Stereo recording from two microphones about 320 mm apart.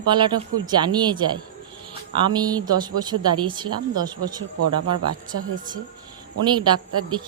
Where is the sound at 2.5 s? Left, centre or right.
Centre.